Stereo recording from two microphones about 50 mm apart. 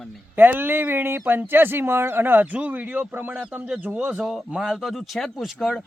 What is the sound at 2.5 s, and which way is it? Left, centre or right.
Speech, right.